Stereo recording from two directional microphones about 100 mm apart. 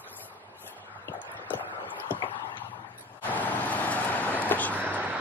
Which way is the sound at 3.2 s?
15° left (ahead or behind).